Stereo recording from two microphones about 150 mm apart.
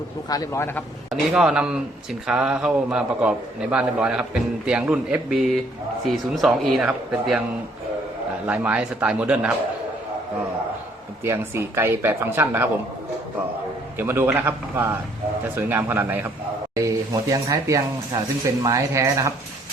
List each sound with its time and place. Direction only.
0.3 s a man's voice: 20° left (ahead or behind)
1.1 s a man's voice: 5° right (ahead or behind)
8.4 s speech: 10° right (ahead or behind)
11.2 s speech: 15° right (ahead or behind)
14.1 s speech: 15° right (ahead or behind)